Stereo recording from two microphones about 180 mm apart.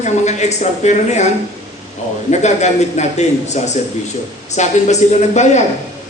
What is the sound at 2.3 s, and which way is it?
A man's voice, 40° left (ahead or behind).